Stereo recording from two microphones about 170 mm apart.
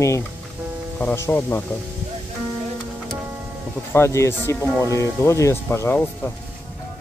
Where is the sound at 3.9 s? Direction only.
15° left (ahead or behind).